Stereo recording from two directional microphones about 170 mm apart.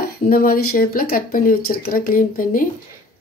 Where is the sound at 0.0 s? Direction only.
60° left (ahead or behind).